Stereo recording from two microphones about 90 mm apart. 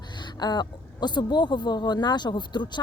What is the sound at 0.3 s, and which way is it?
A woman's voice, 50° left (ahead or behind).